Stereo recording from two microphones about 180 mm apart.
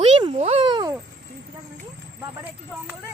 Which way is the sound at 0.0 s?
30° right (ahead or behind).